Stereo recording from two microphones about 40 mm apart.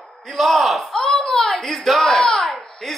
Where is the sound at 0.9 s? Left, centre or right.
Centre.